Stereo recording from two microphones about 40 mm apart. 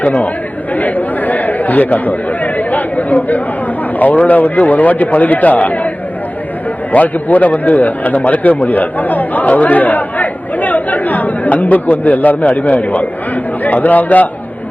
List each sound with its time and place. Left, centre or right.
0.0 s speech: left
6.9 s a man's voice: left